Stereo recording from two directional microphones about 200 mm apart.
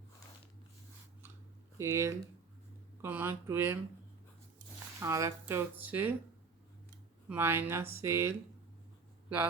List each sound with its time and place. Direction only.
1.8 s speech: 15° right (ahead or behind)
4.9 s speech: 15° right (ahead or behind)
7.3 s speech: 10° right (ahead or behind)